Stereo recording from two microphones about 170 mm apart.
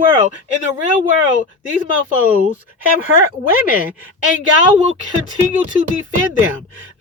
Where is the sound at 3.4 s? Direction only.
55° left (ahead or behind).